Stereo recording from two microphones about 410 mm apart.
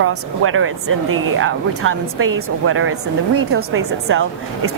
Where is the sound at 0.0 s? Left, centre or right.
Right.